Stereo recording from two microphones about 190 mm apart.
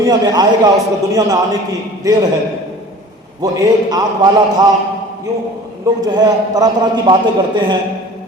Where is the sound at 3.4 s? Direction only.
20° right (ahead or behind).